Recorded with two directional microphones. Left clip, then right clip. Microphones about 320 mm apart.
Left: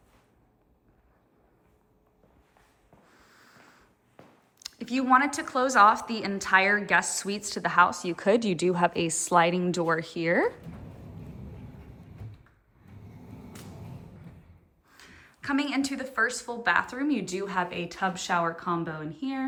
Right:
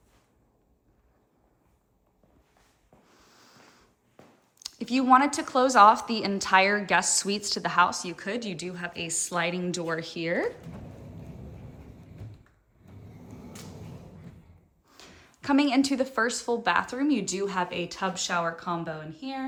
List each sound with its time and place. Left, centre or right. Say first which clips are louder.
3.1 s snort: even; centre
4.6 s a woman's voice: right 3 dB; centre
14.8 s a woman's voice: even; centre